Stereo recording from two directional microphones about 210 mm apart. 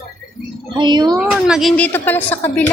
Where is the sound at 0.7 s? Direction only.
20° right (ahead or behind).